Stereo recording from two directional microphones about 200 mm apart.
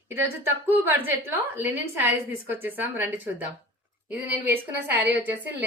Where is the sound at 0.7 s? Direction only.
10° right (ahead or behind).